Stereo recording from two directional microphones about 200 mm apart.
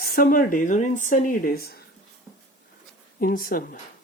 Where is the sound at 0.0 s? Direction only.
45° left (ahead or behind).